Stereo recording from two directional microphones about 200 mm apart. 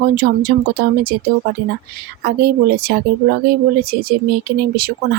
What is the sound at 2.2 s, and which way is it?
Speech, 55° right (ahead or behind).